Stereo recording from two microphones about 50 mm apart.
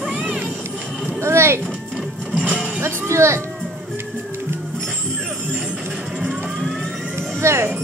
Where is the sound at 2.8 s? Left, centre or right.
Right.